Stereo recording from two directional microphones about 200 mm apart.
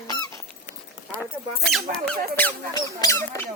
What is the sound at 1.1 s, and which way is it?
Speech, 5° left (ahead or behind).